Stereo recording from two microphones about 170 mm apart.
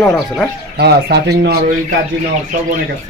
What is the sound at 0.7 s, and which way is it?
Speech, 75° right (ahead or behind).